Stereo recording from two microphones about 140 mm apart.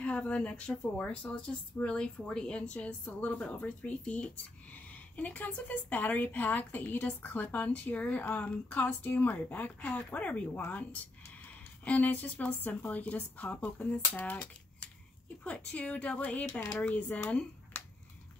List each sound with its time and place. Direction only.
0.0 s a woman's voice: 10° left (ahead or behind)
15.4 s a woman's voice: 10° left (ahead or behind)
16.4 s speech: 20° left (ahead or behind)
16.7 s speech: 10° left (ahead or behind)